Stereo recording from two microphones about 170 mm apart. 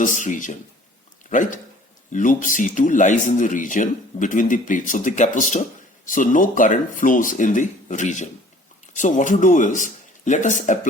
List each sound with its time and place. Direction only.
0.0 s speech: 50° left (ahead or behind)